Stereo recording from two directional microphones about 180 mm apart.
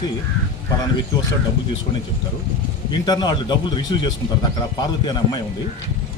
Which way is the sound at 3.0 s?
25° left (ahead or behind).